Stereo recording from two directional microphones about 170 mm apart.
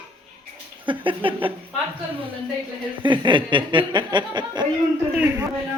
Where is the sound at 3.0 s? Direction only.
25° right (ahead or behind).